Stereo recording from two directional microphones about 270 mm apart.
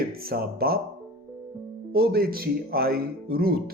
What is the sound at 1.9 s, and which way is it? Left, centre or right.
Speech, right.